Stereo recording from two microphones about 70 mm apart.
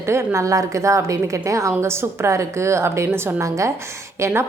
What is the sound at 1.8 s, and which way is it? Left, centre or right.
A woman's voice, right.